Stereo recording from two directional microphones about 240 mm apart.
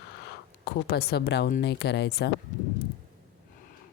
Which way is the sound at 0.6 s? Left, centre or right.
Left.